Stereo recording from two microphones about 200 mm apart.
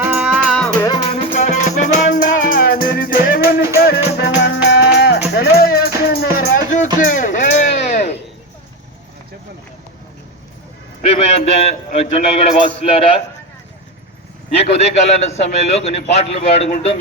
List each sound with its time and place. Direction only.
0.0 s music: 5° right (ahead or behind)
1.1 s music: 40° left (ahead or behind)
4.4 s music: 60° left (ahead or behind); by 6.8 s 45° left (ahead or behind)
7.0 s a sound: 40° left (ahead or behind)
11.0 s a man's voice: 30° left (ahead or behind)
14.5 s a man's voice: 30° left (ahead or behind)